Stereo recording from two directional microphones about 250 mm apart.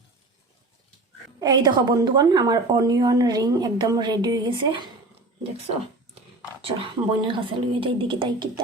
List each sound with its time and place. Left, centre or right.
1.4 s a woman's voice: centre
6.7 s speech: right